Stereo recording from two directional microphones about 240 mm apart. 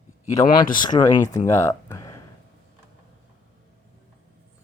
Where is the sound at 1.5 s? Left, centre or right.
Centre.